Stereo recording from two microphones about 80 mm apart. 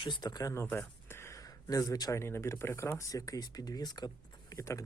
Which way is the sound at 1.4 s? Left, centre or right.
Left.